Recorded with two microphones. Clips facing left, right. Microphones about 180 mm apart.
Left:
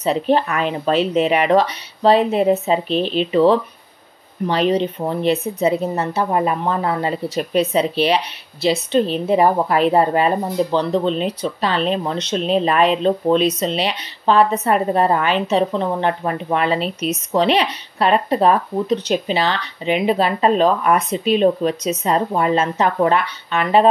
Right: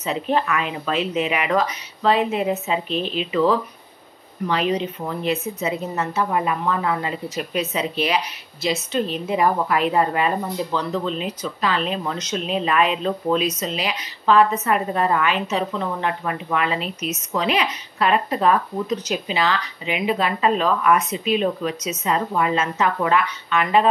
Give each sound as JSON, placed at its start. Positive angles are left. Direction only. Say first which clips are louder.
{"t": 0.0, "sound": "a woman's voice", "louder": "left 5 dB", "side_deg": 35}